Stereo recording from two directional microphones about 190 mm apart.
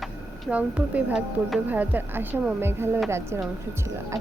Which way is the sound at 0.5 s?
5° right (ahead or behind).